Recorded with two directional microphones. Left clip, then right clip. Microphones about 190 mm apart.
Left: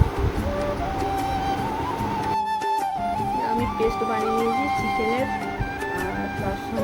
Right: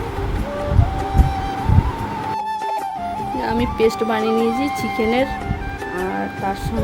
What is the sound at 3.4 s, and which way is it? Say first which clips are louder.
Music: right 9 dB; 60° right (ahead or behind).